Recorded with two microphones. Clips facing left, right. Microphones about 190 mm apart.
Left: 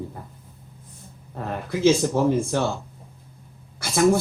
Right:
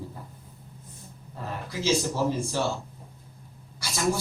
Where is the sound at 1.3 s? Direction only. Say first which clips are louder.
Left 6 dB; 55° left (ahead or behind).